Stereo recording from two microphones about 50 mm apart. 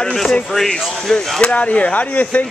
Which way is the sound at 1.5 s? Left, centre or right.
Left.